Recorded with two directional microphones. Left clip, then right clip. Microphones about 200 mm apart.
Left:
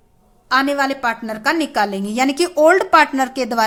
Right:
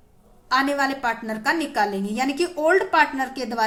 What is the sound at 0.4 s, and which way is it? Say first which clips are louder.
A woman's voice: left 4 dB; 30° left (ahead or behind).